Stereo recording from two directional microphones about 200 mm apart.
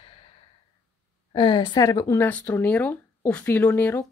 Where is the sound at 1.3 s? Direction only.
25° left (ahead or behind).